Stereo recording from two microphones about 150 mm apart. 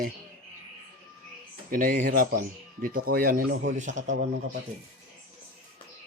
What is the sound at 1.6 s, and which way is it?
Speech, 65° right (ahead or behind).